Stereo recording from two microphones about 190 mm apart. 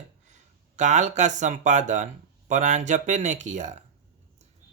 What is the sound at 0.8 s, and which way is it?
Speech, 40° right (ahead or behind).